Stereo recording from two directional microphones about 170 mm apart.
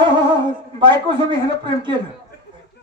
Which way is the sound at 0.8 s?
30° right (ahead or behind).